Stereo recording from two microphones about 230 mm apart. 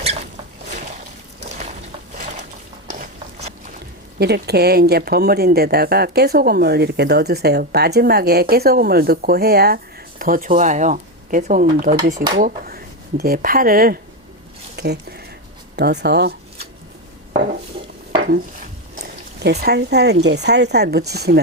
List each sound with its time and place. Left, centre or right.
0.0 s rodents: right
1.4 s a sound: right
4.2 s speech: right
19.0 s speech: right